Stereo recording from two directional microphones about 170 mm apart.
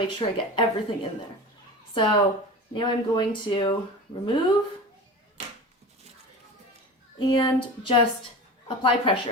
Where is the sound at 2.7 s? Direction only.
25° left (ahead or behind).